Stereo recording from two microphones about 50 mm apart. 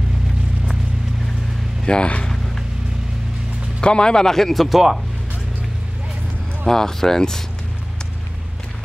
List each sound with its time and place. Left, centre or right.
1.9 s speech: left
2.3 s a sound: centre
3.8 s speech: centre
6.6 s speech: centre